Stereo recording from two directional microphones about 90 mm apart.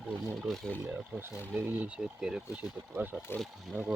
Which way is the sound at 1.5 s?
20° right (ahead or behind).